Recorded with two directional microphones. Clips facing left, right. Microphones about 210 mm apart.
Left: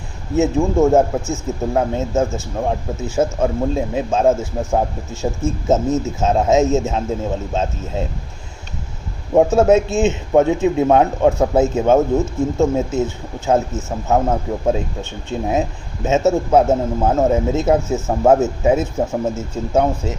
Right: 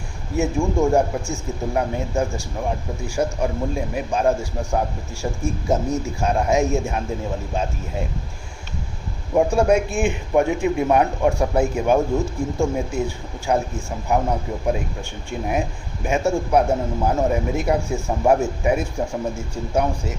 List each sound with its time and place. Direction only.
0.3 s speech: 20° left (ahead or behind)
9.3 s speech: 25° left (ahead or behind)
15.3 s speech: 20° left (ahead or behind)